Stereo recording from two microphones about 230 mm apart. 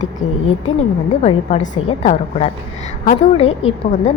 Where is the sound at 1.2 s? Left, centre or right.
Left.